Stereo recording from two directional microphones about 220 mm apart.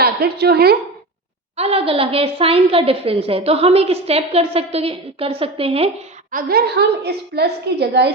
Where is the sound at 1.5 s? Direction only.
25° right (ahead or behind).